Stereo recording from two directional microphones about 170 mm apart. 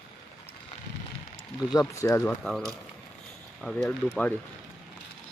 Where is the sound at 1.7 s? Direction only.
15° left (ahead or behind).